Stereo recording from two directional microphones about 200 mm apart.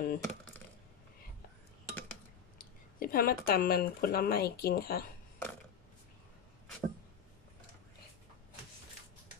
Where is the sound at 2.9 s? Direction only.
50° left (ahead or behind).